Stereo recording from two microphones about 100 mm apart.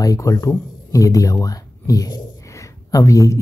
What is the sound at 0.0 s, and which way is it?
Speech, 35° left (ahead or behind).